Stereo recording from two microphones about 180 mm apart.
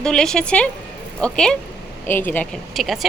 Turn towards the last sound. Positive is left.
turn(degrees=0)  # may be behind; listen again after turning